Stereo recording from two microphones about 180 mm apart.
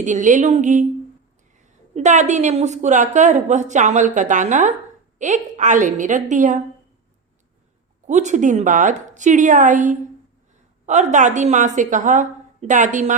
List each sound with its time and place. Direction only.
0.0 s a woman's voice: 45° right (ahead or behind)
8.0 s a woman's voice: 40° right (ahead or behind)